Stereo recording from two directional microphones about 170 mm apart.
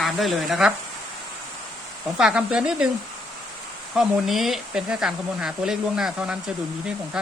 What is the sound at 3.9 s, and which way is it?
Speech, centre (ahead or behind).